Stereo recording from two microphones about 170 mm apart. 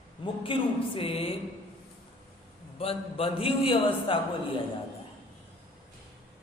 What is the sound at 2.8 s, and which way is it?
A man's voice, 35° left (ahead or behind).